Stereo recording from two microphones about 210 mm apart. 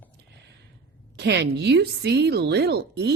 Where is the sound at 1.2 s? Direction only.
55° right (ahead or behind).